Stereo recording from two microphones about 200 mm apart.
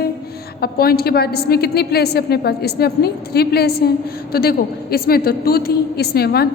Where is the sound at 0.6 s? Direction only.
50° left (ahead or behind).